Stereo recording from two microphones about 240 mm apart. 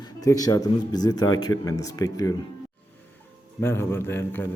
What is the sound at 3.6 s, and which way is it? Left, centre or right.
Speech, centre.